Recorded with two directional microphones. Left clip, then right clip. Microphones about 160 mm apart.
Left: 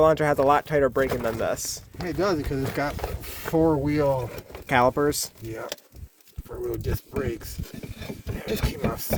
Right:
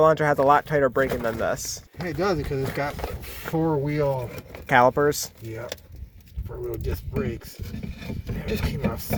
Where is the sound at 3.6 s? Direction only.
55° left (ahead or behind).